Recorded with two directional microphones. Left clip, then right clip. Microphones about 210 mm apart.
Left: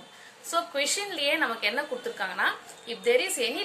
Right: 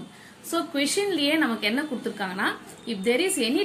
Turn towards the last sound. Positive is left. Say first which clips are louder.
# right 2 dB
turn(degrees=0)  # may be behind; listen again after turning